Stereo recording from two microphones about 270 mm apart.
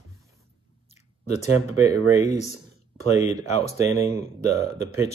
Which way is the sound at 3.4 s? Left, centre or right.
Left.